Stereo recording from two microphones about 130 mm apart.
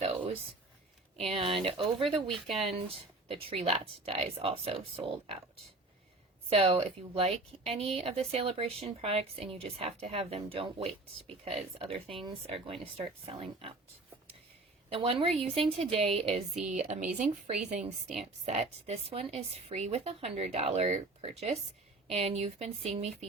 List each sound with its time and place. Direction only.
1.2 s speech: 45° right (ahead or behind)
2.2 s speech: 5° left (ahead or behind)
2.8 s speech: 45° right (ahead or behind)
6.5 s speech: 40° right (ahead or behind)
14.8 s speech: 45° right (ahead or behind)
16.6 s speech: 75° right (ahead or behind); by 23.1 s 55° right (ahead or behind)